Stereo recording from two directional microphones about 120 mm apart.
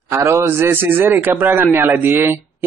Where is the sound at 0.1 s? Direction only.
25° right (ahead or behind).